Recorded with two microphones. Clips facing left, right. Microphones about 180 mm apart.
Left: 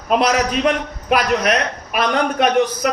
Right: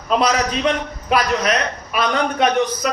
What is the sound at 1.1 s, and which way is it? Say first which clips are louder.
Speech: left 1 dB; 55° left (ahead or behind).